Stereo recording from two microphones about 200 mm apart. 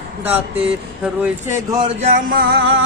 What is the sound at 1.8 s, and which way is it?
Music, 35° right (ahead or behind).